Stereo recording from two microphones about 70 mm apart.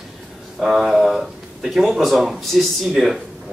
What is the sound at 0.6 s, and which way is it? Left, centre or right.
Speech, centre.